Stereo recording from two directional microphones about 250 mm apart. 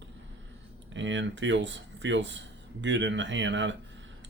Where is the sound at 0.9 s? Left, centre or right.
Right.